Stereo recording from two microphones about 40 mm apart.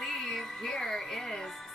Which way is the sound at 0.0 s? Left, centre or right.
Centre.